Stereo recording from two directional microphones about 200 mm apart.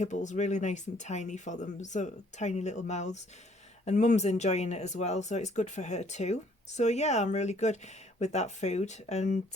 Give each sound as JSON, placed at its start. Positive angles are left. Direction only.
{"t": 0.0, "sound": "speech", "side_deg": 35}